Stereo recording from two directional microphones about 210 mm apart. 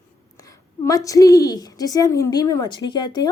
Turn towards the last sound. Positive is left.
turn(degrees=20)  # may be behind; listen again after turning